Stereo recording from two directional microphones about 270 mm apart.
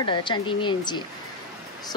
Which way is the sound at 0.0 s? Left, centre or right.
Centre.